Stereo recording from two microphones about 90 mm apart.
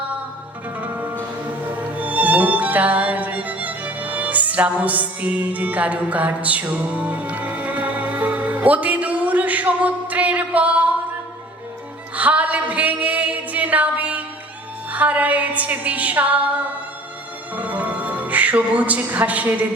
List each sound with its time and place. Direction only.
1.7 s music: 15° right (ahead or behind)
12.1 s a sound: 15° right (ahead or behind)
14.9 s female singing: 15° right (ahead or behind)
17.5 s speech: 15° right (ahead or behind)